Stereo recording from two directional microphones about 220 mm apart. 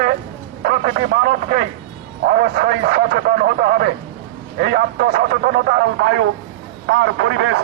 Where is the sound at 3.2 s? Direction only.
45° right (ahead or behind).